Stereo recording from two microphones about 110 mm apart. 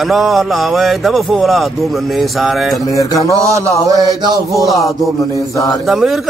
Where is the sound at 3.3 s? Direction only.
30° right (ahead or behind).